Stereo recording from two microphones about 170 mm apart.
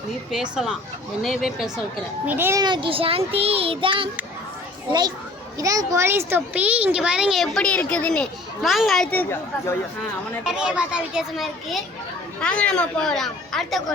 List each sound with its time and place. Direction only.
0.3 s a child's voice: 5° right (ahead or behind)
2.6 s child singing: 25° right (ahead or behind)
4.9 s a child's voice: 25° right (ahead or behind); by 9.7 s 10° left (ahead or behind)
10.4 s speech: 5° right (ahead or behind)